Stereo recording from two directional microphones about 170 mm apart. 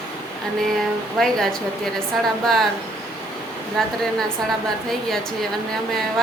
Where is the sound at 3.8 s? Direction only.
5° left (ahead or behind).